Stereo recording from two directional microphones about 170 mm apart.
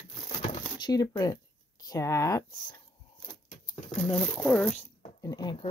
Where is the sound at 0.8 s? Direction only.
25° left (ahead or behind).